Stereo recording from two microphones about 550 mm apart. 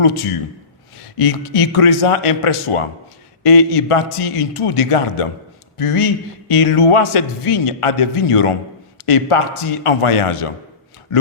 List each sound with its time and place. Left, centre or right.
0.0 s a man's voice: left